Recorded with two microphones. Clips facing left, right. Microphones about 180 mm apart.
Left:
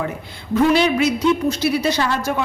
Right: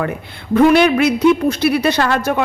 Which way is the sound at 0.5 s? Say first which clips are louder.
Right 5 dB; 60° right (ahead or behind).